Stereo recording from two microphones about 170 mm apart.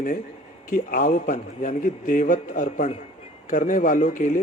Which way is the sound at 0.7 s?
55° left (ahead or behind).